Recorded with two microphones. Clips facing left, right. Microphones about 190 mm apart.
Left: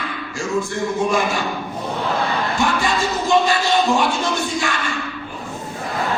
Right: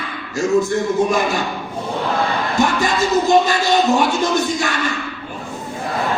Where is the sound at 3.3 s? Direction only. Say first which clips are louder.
Left 1 dB; 45° right (ahead or behind).